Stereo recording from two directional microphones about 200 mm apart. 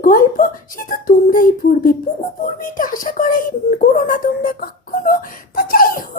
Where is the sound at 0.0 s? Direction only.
40° left (ahead or behind).